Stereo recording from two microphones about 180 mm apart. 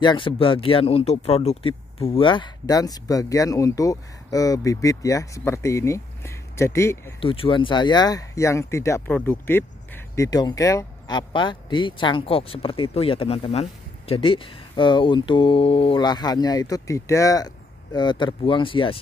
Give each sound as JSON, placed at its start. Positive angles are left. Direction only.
{"t": 0.0, "sound": "speech", "side_deg": 25}
{"t": 7.2, "sound": "speech", "side_deg": 30}